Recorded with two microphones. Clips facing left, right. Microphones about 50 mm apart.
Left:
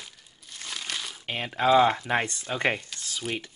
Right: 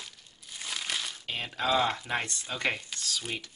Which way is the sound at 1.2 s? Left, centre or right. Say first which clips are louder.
Left 9 dB; left.